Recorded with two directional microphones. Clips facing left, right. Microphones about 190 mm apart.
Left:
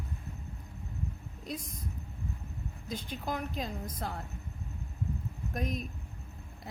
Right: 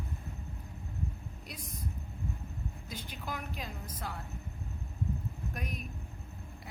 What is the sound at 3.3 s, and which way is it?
Speech, 40° left (ahead or behind).